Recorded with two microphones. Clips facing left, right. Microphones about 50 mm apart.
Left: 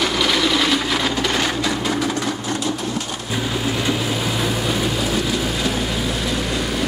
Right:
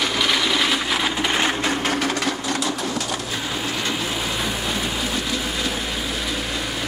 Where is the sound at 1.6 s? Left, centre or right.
Right.